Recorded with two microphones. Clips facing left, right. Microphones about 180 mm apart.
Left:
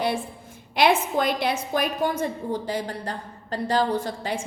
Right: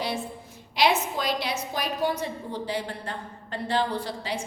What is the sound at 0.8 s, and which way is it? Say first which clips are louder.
A woman's voice: left 4 dB; 55° left (ahead or behind).